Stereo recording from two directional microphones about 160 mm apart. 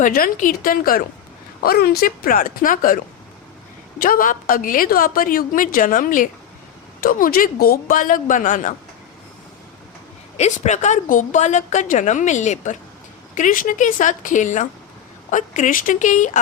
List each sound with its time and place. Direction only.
0.0 s a woman's voice: 60° left (ahead or behind)
10.3 s a woman's voice: 45° left (ahead or behind)